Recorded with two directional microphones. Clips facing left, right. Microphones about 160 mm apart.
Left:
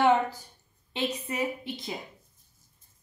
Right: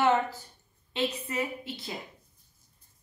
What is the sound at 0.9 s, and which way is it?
A woman's voice, 20° left (ahead or behind).